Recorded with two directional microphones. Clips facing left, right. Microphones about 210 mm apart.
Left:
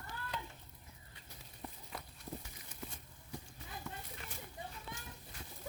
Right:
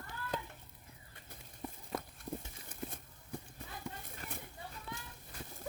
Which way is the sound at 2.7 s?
50° right (ahead or behind).